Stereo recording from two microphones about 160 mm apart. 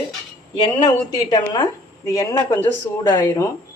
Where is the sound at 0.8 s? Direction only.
25° left (ahead or behind).